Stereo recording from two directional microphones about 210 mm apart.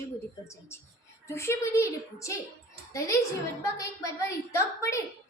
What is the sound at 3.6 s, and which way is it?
A child's voice, 15° left (ahead or behind).